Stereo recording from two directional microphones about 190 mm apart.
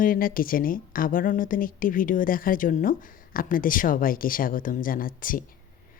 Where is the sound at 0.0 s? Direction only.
50° left (ahead or behind).